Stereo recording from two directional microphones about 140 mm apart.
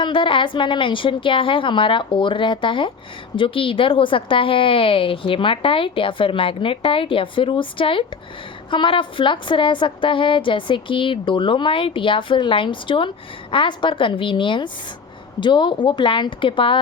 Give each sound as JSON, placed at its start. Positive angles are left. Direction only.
{"t": 0.0, "sound": "a woman's voice", "side_deg": 35}